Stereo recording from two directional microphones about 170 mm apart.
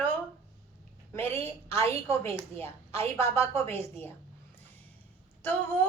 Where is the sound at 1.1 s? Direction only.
15° left (ahead or behind).